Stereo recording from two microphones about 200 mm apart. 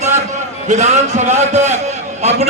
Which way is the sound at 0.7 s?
35° right (ahead or behind).